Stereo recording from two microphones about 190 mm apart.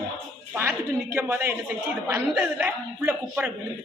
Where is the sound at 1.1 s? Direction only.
10° right (ahead or behind).